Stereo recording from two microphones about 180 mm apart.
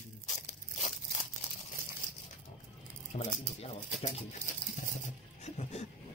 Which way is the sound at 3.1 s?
35° left (ahead or behind).